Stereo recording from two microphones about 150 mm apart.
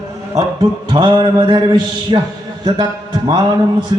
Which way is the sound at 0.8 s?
30° right (ahead or behind).